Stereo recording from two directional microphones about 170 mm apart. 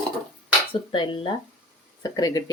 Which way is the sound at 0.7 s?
30° left (ahead or behind).